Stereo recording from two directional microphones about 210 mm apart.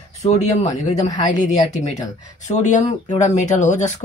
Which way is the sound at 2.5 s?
35° left (ahead or behind).